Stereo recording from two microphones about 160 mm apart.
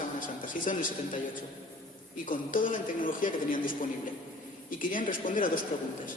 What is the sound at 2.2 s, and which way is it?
A man's voice, 55° left (ahead or behind).